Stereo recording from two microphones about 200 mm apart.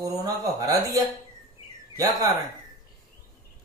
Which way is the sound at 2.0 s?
20° right (ahead or behind).